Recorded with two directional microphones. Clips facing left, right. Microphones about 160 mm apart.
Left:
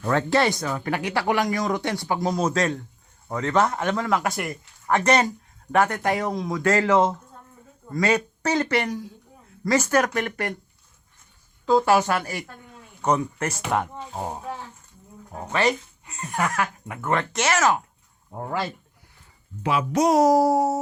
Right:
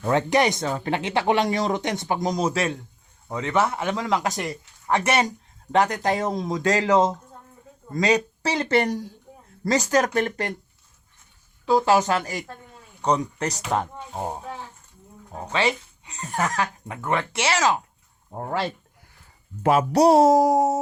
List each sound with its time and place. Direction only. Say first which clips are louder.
0.0 s speech: right 1 dB; 20° right (ahead or behind)
8.7 s speech: right 3 dB; 35° right (ahead or behind)
11.6 s speech: even; 20° right (ahead or behind)
15.3 s speech: left 1 dB; 15° right (ahead or behind)
19.6 s speech: right 4 dB; 40° right (ahead or behind); by 20.7 s 20° right (ahead or behind)